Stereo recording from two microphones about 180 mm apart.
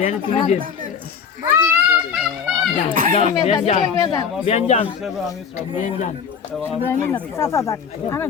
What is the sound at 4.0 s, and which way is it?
Speech, 20° left (ahead or behind).